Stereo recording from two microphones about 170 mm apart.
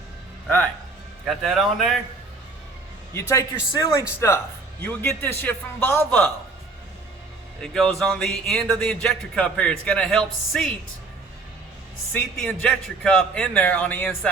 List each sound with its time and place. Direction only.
1.2 s speech: centre (ahead or behind)
3.2 s a man's voice: 15° left (ahead or behind)
7.6 s speech: 5° left (ahead or behind)
12.1 s a man's voice: 10° left (ahead or behind)